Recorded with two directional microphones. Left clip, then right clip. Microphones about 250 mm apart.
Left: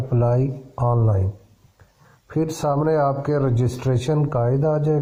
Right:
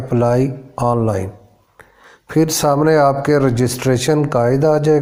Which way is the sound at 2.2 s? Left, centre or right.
Right.